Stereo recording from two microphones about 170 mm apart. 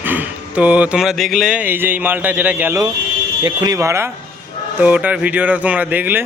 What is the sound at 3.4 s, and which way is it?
Speech, 20° right (ahead or behind).